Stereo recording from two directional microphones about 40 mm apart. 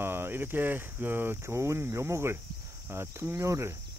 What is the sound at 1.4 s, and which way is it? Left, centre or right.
Speech, right.